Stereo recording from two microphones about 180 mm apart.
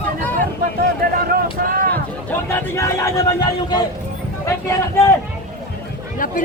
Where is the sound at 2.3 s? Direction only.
10° left (ahead or behind).